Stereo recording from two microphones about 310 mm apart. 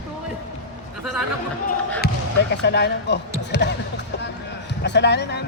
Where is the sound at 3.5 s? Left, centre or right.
Left.